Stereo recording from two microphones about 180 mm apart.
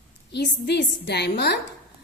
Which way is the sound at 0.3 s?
70° left (ahead or behind).